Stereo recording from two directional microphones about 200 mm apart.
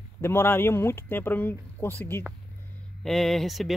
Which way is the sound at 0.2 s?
10° left (ahead or behind).